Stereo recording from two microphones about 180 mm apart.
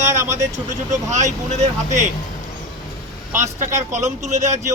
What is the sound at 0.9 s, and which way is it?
Speech, 40° right (ahead or behind).